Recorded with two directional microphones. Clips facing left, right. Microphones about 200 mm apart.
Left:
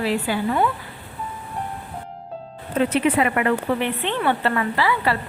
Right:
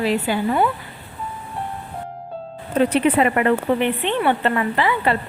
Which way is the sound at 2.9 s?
30° right (ahead or behind).